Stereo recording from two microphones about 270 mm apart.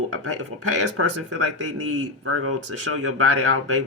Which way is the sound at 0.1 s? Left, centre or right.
Right.